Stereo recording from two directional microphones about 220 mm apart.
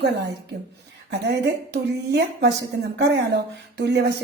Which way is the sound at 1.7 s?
50° right (ahead or behind).